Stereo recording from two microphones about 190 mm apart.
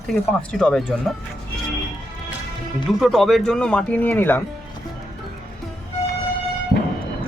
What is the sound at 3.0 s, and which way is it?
Speech, centre (ahead or behind).